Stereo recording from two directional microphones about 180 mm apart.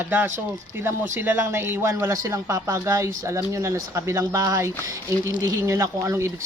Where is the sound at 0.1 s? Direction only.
10° right (ahead or behind).